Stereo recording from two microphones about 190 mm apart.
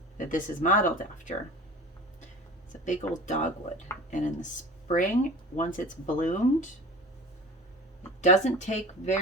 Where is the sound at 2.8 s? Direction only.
40° left (ahead or behind).